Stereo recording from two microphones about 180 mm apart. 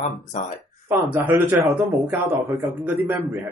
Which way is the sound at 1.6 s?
Centre (ahead or behind).